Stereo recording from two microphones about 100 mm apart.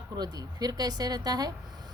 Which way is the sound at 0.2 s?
40° right (ahead or behind).